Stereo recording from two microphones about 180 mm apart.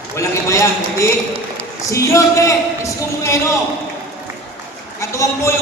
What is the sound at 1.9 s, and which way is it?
A man's voice, 15° left (ahead or behind).